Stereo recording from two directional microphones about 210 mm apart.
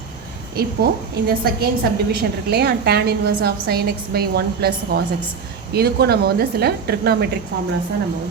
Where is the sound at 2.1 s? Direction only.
50° right (ahead or behind).